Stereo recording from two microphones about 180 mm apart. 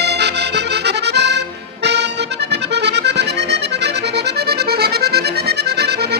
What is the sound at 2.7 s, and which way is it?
Accordion, 70° right (ahead or behind).